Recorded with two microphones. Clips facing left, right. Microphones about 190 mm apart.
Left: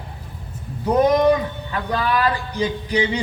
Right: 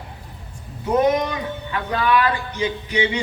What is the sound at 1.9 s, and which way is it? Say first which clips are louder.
A man's voice: right 1 dB; 35° left (ahead or behind).